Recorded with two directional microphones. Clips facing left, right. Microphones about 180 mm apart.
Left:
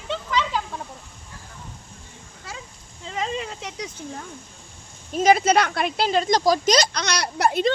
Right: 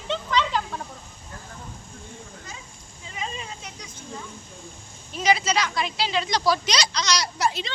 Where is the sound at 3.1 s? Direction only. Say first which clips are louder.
Left 7 dB; 85° left.